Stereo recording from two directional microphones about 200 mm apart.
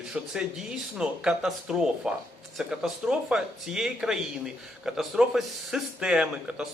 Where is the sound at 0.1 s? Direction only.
5° right (ahead or behind).